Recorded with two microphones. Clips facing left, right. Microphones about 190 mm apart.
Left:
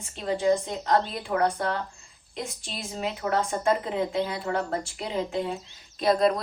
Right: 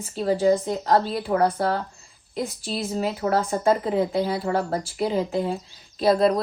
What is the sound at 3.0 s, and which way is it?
A woman's voice, 35° right (ahead or behind).